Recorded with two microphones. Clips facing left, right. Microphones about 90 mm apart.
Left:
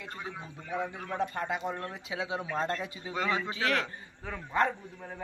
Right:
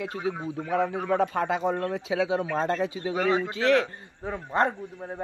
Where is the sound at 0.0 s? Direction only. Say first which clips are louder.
Right 11 dB; 80° right.